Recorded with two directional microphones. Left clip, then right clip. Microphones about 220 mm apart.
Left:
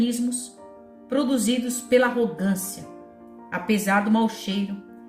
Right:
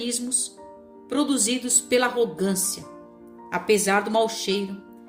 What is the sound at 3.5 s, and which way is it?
A woman's voice, 45° right (ahead or behind).